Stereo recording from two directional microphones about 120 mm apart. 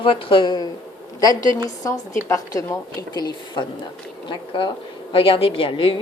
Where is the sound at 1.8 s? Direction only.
25° left (ahead or behind); by 6.0 s 50° left (ahead or behind).